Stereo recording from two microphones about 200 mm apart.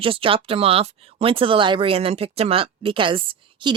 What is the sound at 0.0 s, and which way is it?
Speech, 25° right (ahead or behind).